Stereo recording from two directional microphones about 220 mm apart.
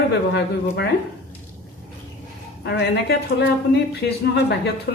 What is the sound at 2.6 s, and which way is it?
A woman's voice, 50° left (ahead or behind).